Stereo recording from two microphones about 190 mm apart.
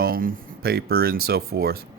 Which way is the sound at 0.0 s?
50° right (ahead or behind).